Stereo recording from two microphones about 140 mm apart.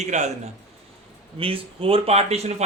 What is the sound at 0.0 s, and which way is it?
Speech, 55° right (ahead or behind).